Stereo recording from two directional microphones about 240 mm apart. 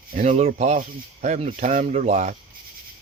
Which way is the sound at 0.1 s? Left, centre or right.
Right.